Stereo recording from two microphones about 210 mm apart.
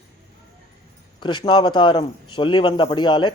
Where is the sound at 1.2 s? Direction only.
20° left (ahead or behind).